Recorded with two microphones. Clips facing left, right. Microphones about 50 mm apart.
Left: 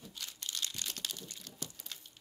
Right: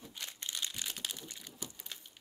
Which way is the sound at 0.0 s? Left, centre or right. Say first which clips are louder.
Right 1 dB; right.